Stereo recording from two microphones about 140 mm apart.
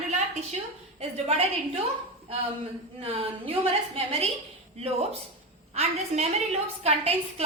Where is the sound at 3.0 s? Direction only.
45° right (ahead or behind).